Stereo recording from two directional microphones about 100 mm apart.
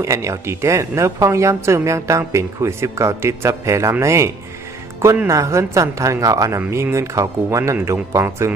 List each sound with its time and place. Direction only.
0.0 s speech: 30° right (ahead or behind)